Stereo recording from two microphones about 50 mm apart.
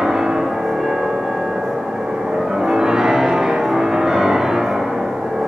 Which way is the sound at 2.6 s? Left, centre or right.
Centre.